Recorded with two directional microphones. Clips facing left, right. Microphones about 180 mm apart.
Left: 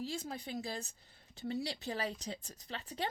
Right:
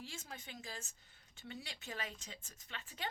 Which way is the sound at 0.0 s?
35° left (ahead or behind).